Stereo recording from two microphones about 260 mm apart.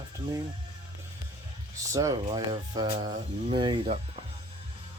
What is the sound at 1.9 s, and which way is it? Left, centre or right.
Speech, centre.